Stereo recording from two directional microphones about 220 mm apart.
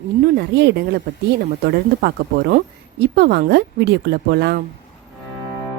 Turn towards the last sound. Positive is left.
turn(degrees=-50)  # may be behind; listen again after turning